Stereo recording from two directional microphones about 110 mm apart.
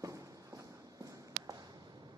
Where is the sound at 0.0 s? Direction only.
30° right (ahead or behind).